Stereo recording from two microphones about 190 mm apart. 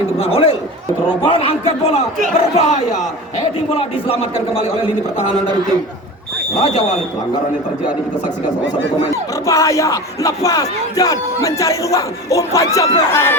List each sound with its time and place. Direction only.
0.2 s a man's voice: 30° left (ahead or behind)
6.6 s a man's voice: 35° left (ahead or behind)
9.5 s music: 15° left (ahead or behind)